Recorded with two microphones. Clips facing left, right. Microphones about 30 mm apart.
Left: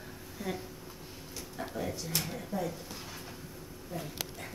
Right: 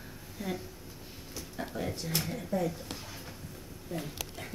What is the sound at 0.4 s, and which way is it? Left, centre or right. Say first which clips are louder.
Speech: right 1 dB; centre.